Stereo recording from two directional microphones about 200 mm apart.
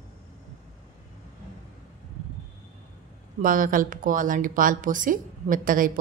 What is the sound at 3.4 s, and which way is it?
Speech, 45° right (ahead or behind).